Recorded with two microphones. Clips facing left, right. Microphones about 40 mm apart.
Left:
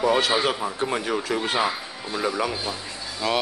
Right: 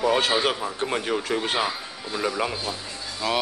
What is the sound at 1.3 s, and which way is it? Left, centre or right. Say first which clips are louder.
Speech: even; right.